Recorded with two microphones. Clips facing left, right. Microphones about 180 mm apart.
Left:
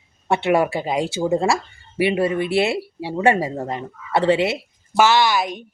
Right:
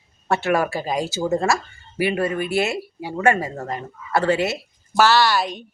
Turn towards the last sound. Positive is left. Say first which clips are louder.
# even
turn(degrees=10)  # may be behind; listen again after turning